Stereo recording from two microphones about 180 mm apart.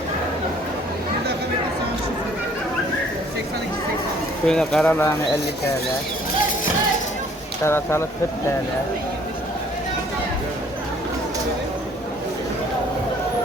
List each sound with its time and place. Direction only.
4.4 s speech: 5° left (ahead or behind)
7.6 s speech: 15° left (ahead or behind)